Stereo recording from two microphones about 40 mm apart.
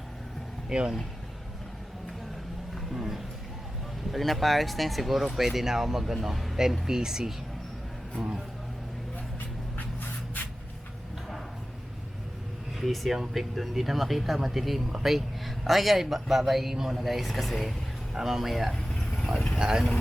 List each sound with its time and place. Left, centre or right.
0.7 s speech: centre
2.9 s a sound: centre
4.1 s a man's voice: centre
6.8 s speech: centre
8.2 s a man's voice: centre
9.7 s spray: left
12.8 s a man's voice: centre
18.1 s speech: centre
19.5 s speech: centre